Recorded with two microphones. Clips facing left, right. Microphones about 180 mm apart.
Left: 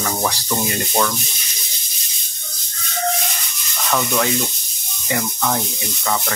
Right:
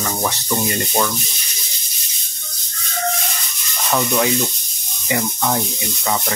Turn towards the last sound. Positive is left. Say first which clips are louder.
# right 1 dB
turn(degrees=-10)  # may be behind; listen again after turning